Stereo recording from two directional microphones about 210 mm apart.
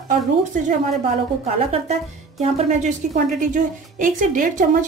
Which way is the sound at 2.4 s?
35° right (ahead or behind).